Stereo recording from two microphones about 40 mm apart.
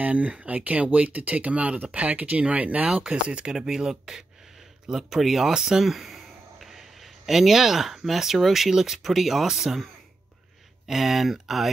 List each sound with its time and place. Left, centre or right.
0.0 s speech: right
3.5 s speech: centre
10.9 s speech: centre